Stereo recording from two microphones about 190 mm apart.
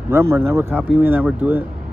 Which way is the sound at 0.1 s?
15° right (ahead or behind).